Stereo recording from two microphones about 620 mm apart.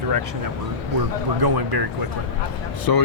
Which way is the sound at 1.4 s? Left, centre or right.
Right.